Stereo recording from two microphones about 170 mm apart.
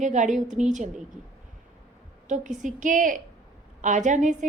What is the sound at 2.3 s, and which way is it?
A woman's voice, 50° right (ahead or behind).